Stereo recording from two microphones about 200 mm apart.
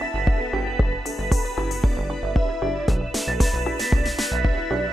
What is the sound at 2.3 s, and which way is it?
Music, centre (ahead or behind).